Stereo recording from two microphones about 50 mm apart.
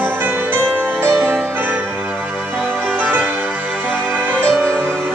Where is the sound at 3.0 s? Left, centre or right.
Right.